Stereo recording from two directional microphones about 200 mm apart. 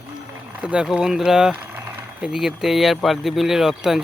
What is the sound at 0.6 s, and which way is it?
Speech, 5° right (ahead or behind).